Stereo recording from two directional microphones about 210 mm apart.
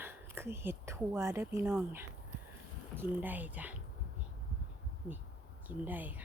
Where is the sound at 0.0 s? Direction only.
10° right (ahead or behind).